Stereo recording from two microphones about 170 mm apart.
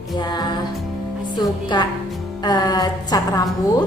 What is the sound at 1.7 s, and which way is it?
A woman's voice, 25° left (ahead or behind).